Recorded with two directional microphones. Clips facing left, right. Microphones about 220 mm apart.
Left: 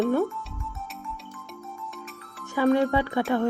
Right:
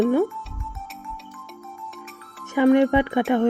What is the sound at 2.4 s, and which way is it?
Speech, 20° right (ahead or behind).